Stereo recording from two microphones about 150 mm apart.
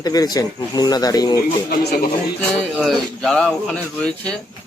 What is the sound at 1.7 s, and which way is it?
Speech, 90° left.